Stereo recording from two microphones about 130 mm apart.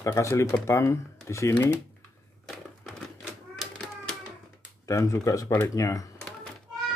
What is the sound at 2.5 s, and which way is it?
Crumpling, centre (ahead or behind).